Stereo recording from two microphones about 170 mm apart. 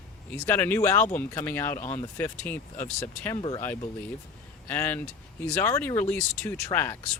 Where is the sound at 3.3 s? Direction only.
30° left (ahead or behind).